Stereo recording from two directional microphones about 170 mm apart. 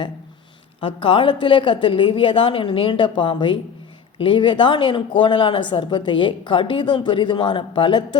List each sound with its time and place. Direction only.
0.8 s speech: 30° left (ahead or behind)